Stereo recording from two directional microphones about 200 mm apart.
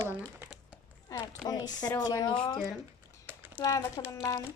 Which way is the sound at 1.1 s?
15° left (ahead or behind).